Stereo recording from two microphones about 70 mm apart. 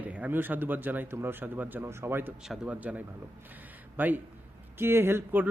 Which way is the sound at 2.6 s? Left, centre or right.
Right.